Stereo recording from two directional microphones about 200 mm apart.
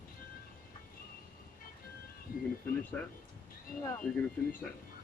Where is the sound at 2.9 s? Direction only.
5° left (ahead or behind).